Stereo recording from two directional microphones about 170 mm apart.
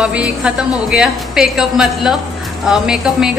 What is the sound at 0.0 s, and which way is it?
A woman's voice, 5° right (ahead or behind).